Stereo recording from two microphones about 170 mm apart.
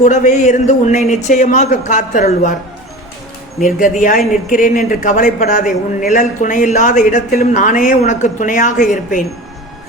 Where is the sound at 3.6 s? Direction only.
50° left (ahead or behind).